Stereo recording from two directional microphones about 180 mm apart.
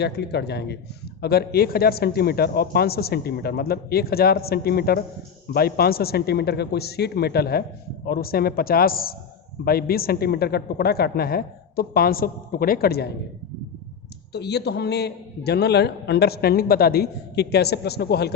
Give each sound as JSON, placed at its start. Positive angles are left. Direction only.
{"t": 0.0, "sound": "a man's voice", "side_deg": 65}
{"t": 14.3, "sound": "a man's voice", "side_deg": 65}